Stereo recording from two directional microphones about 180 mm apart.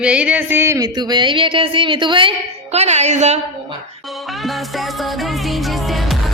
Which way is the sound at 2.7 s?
40° right (ahead or behind).